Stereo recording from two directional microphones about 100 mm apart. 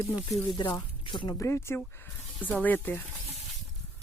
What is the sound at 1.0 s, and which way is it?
Speech, 55° left (ahead or behind).